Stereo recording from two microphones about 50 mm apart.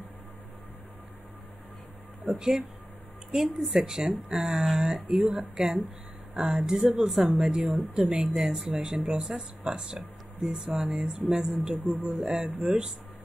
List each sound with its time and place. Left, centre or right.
2.2 s speech: centre